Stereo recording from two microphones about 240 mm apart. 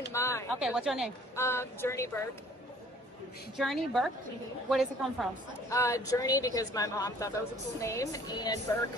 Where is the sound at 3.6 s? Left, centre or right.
Centre.